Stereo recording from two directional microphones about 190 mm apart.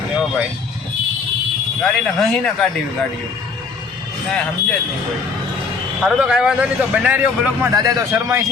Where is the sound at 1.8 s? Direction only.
5° left (ahead or behind).